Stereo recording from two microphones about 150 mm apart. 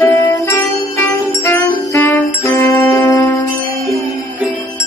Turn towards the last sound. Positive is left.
turn(degrees=5)  # may be behind; listen again after turning